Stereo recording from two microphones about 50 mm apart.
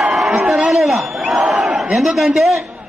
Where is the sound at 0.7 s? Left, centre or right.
Centre.